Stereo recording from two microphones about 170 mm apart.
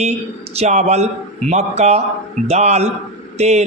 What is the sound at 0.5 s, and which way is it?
A man's voice, 40° right (ahead or behind).